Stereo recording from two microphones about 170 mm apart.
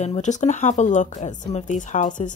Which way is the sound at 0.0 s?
45° left (ahead or behind).